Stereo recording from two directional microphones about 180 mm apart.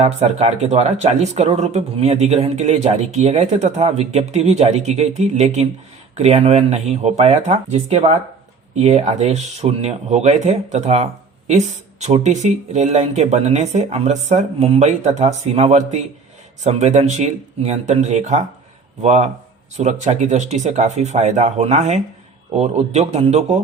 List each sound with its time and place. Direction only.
0.0 s speech: 35° right (ahead or behind)